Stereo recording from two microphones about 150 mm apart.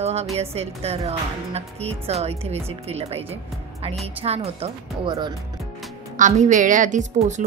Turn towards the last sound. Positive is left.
turn(degrees=-55)  # may be behind; listen again after turning